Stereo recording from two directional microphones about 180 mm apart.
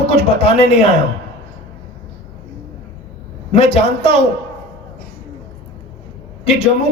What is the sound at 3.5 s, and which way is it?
Speech, 35° left (ahead or behind).